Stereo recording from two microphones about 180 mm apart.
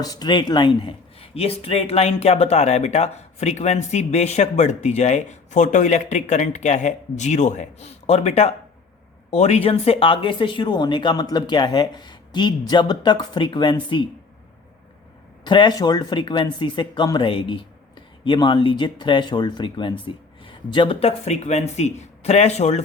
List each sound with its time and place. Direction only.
0.0 s speech: 20° left (ahead or behind)
15.4 s speech: 25° left (ahead or behind)